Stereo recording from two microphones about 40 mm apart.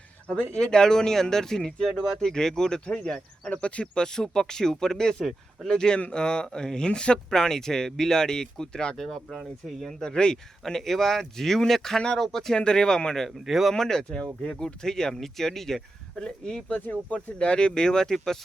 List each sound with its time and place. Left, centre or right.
0.5 s speech: left
2.8 s speech: left
4.0 s speech: centre
7.3 s speech: centre
9.0 s speech: centre
10.1 s speech: left
10.3 s speech: centre
12.5 s speech: left
13.4 s speech: centre
13.7 s speech: centre
16.6 s speech: left
17.3 s speech: left